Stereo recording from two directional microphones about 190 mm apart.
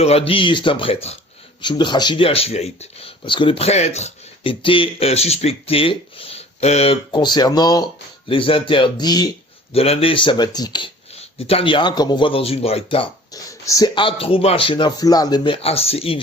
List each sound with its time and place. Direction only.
0.0 s speech: 30° left (ahead or behind)
9.7 s speech: 30° left (ahead or behind)
13.5 s speech: 15° left (ahead or behind)